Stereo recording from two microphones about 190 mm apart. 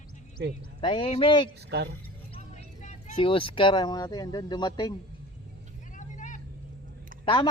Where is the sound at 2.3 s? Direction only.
35° left (ahead or behind).